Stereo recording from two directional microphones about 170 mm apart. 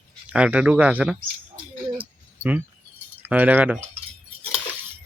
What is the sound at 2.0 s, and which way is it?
Cricket, 10° right (ahead or behind).